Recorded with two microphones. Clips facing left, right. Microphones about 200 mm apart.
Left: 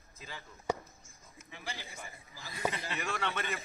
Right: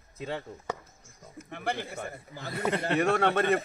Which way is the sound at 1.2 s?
60° right (ahead or behind).